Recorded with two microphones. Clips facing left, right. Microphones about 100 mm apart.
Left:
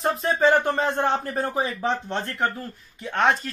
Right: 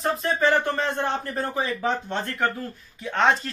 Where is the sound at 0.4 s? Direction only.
15° left (ahead or behind).